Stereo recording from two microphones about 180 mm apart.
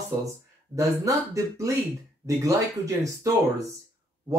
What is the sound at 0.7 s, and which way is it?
Speech, 15° right (ahead or behind).